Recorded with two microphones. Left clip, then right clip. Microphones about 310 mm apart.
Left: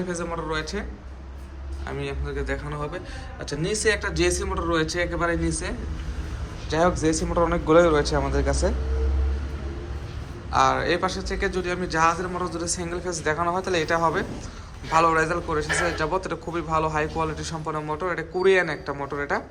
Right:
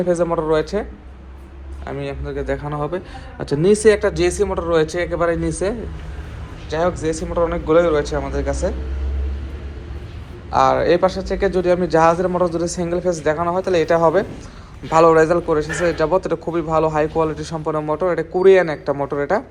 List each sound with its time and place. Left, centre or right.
0.1 s speech: centre
1.9 s a man's voice: centre
6.7 s a man's voice: centre
10.5 s a man's voice: centre